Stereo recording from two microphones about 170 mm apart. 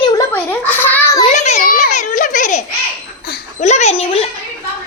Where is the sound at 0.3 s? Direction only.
10° left (ahead or behind).